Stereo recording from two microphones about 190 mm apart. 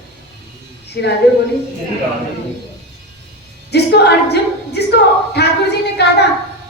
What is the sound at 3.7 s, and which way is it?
A woman's voice, 60° left (ahead or behind).